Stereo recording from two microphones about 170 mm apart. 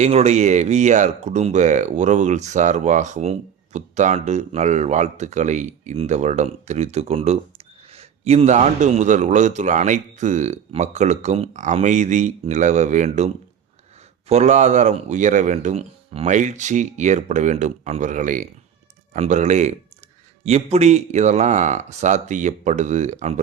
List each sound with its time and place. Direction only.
0.0 s speech: 40° right (ahead or behind)